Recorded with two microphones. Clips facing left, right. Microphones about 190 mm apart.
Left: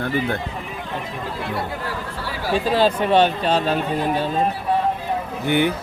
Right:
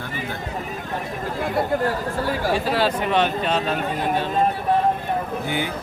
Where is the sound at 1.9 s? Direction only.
50° right (ahead or behind).